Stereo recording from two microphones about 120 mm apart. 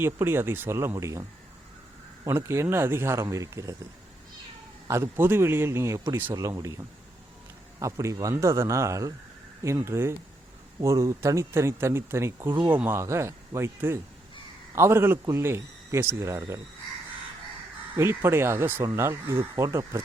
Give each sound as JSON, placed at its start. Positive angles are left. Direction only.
{"t": 0.0, "sound": "speech", "side_deg": -20}
{"t": 2.2, "sound": "speech", "side_deg": -20}
{"t": 4.9, "sound": "speech", "side_deg": -20}
{"t": 12.5, "sound": "speech", "side_deg": -40}
{"t": 12.8, "sound": "speech", "side_deg": -20}
{"t": 17.9, "sound": "speech", "side_deg": -20}